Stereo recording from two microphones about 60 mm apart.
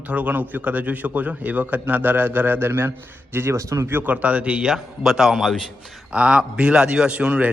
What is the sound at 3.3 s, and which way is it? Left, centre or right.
Speech, right.